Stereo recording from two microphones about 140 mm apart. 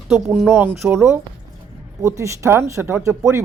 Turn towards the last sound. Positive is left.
turn(degrees=-20)  # may be behind; listen again after turning